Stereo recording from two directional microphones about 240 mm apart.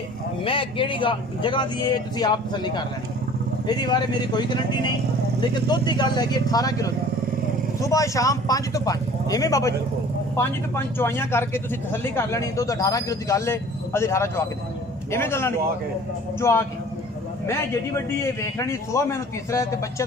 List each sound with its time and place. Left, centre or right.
0.4 s speech: left
5.7 s speech: centre